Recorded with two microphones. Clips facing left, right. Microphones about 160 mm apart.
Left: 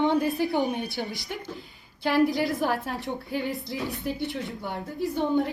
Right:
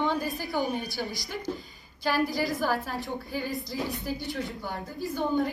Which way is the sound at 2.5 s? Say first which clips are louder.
Left 1 dB; 20° left (ahead or behind).